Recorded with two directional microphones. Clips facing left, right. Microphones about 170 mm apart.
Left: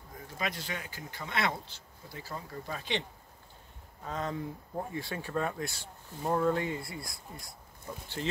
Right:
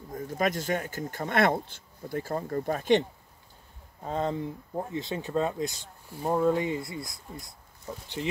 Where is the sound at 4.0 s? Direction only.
30° right (ahead or behind).